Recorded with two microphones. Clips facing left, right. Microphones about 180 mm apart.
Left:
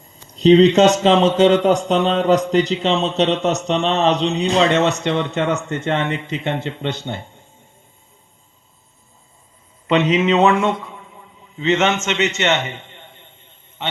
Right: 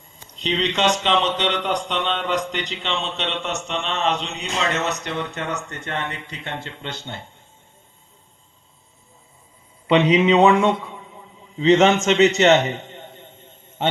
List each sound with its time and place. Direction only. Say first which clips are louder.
0.3 s speech: left 13 dB; 40° left (ahead or behind); by 7.3 s 15° left (ahead or behind)
9.9 s a man's voice: even; 15° right (ahead or behind)
11.5 s a man's voice: right 3 dB; 35° right (ahead or behind)
12.0 s a sound: right 5 dB; 35° right (ahead or behind)